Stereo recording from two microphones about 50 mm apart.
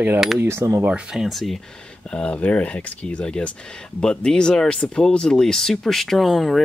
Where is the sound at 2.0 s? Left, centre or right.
Left.